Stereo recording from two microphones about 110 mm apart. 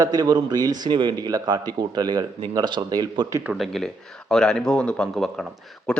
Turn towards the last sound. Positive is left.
turn(degrees=10)  # may be behind; listen again after turning